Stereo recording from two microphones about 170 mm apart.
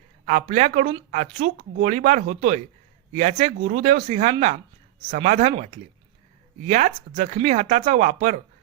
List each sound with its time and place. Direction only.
0.3 s speech: 45° right (ahead or behind)